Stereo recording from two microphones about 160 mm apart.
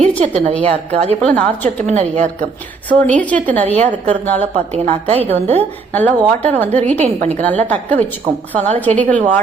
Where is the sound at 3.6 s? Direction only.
40° right (ahead or behind).